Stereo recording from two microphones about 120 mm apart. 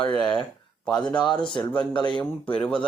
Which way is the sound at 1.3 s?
40° left (ahead or behind).